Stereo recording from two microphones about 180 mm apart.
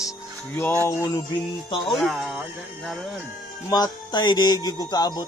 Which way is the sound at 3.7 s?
20° left (ahead or behind).